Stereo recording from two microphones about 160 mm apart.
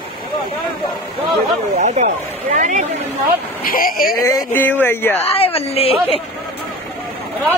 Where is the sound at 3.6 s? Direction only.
65° left (ahead or behind).